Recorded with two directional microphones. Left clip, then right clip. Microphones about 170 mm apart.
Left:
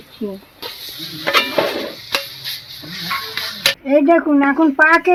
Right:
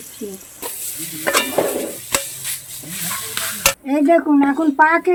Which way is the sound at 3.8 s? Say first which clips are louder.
Left 2 dB; 40° left (ahead or behind).